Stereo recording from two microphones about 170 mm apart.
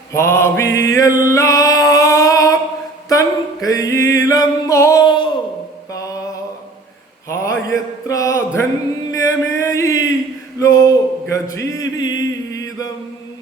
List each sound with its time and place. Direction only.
0.1 s music: 15° left (ahead or behind)
3.1 s a sound: 20° left (ahead or behind)
7.3 s mantra: 15° left (ahead or behind)
9.1 s music: 20° left (ahead or behind)
10.6 s a sound: 20° left (ahead or behind)
12.5 s chant: 20° left (ahead or behind)